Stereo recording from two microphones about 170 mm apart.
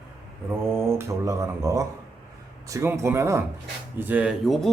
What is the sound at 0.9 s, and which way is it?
A man's voice, 15° right (ahead or behind).